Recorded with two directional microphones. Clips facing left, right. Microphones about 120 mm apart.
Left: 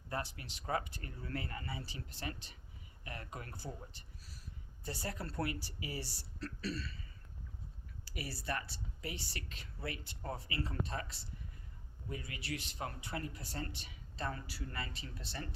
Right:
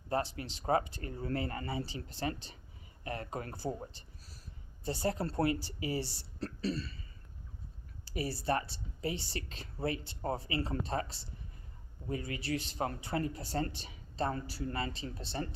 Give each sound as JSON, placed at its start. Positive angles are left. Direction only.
{"t": 0.1, "sound": "speech", "side_deg": -30}
{"t": 8.0, "sound": "speech", "side_deg": -30}